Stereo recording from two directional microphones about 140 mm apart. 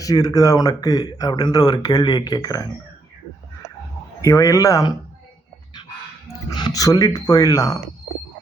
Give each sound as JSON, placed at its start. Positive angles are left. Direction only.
{"t": 0.0, "sound": "speech", "side_deg": 25}
{"t": 4.2, "sound": "speech", "side_deg": 25}
{"t": 6.2, "sound": "speech", "side_deg": 25}